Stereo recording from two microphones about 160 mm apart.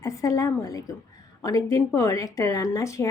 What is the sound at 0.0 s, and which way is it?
Speech, 20° left (ahead or behind).